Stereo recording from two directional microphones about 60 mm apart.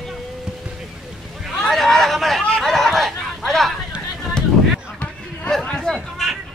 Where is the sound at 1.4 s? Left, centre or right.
Centre.